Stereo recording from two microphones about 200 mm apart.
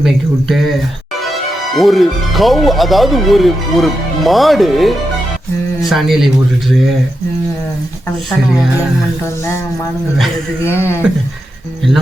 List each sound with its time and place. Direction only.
0.0 s speech: centre (ahead or behind)
1.8 s speech: centre (ahead or behind)
10.6 s speech: 10° left (ahead or behind)